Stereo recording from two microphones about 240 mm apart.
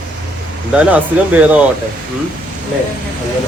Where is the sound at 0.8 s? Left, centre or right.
Centre.